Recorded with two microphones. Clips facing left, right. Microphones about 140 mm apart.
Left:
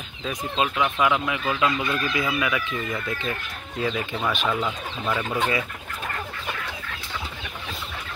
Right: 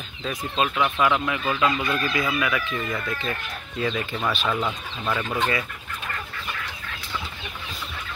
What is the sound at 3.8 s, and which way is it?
Speech, 5° left (ahead or behind).